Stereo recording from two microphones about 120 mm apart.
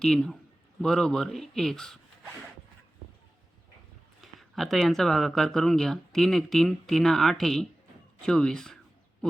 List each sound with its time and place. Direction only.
0.0 s speech: 5° left (ahead or behind)
4.2 s speech: centre (ahead or behind)